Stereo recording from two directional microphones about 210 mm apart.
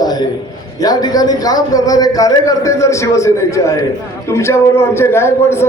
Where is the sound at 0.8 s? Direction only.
20° left (ahead or behind).